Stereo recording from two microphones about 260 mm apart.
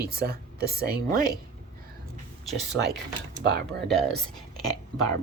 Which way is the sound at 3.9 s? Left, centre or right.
Centre.